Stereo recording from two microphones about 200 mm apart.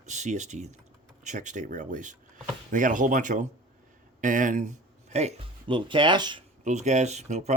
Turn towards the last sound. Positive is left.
turn(degrees=-35)  # may be behind; listen again after turning